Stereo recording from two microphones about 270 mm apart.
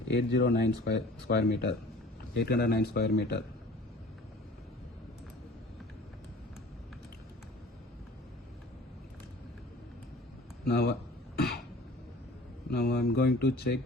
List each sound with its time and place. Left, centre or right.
0.1 s speech: left
10.7 s speech: left
11.3 s cough: left
12.7 s speech: left